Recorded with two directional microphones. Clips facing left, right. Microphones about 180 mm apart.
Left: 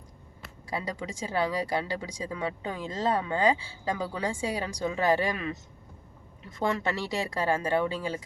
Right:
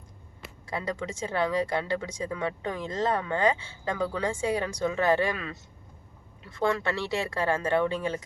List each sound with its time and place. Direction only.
0.8 s speech: 15° left (ahead or behind)